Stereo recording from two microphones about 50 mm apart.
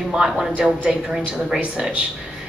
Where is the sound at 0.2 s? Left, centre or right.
Right.